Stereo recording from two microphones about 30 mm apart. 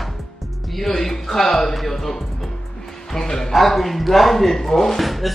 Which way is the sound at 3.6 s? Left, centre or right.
Centre.